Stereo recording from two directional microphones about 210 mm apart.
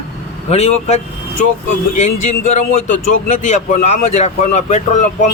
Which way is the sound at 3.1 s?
35° left (ahead or behind).